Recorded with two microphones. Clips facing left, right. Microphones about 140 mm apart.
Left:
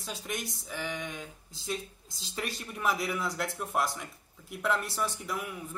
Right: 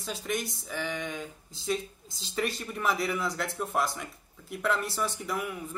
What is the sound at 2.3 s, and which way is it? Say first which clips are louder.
A man's voice: right 5 dB; centre (ahead or behind).